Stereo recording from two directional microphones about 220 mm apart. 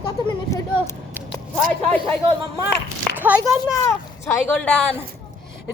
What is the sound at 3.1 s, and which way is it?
Speech, 10° right (ahead or behind).